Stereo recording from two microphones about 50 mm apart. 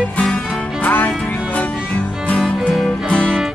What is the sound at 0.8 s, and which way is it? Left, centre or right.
Music, left.